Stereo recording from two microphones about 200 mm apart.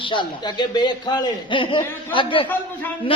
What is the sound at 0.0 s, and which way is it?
A man's voice, 25° left (ahead or behind).